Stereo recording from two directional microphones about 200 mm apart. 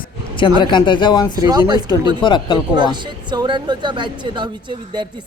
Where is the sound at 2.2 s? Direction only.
25° left (ahead or behind).